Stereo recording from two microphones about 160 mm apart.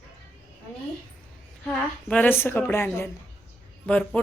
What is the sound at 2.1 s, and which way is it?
A woman's voice, 10° left (ahead or behind).